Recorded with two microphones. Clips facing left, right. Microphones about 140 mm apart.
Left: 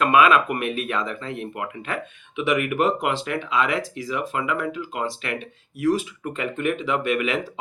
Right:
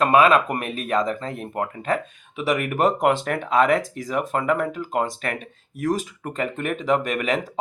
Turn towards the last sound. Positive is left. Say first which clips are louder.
# even
turn(degrees=-40)  # may be behind; listen again after turning